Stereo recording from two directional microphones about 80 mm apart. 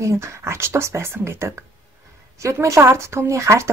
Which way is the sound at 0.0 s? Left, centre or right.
Right.